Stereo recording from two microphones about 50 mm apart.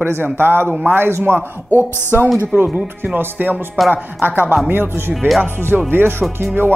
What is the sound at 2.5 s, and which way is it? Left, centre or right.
Speech, right.